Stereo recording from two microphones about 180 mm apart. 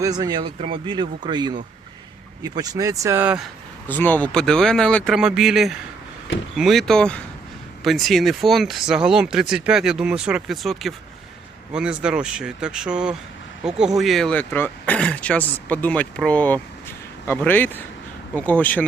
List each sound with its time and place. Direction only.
0.0 s speech: 20° right (ahead or behind); by 3.5 s 5° right (ahead or behind)
3.8 s speech: 10° left (ahead or behind)